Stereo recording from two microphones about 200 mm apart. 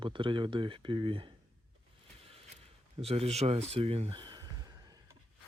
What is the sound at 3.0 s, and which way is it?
Speech, 30° right (ahead or behind).